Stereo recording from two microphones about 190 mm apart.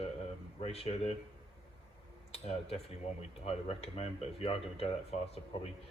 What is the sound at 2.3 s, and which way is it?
Speech, 30° left (ahead or behind).